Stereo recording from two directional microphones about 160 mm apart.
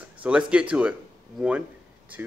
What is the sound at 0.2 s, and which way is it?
Speech, 10° right (ahead or behind).